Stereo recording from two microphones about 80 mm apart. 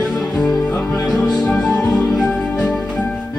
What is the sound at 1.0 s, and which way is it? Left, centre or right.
Music, centre.